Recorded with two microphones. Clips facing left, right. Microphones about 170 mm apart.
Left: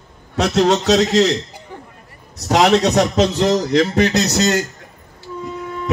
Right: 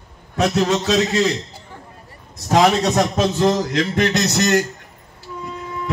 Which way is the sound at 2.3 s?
75° left (ahead or behind).